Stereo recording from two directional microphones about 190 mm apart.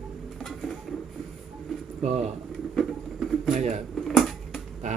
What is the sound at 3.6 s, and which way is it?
Speech, 35° right (ahead or behind).